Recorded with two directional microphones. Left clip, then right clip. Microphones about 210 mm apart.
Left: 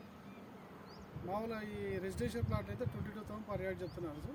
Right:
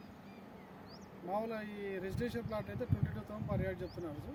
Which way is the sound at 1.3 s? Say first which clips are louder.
Right 2 dB; centre (ahead or behind).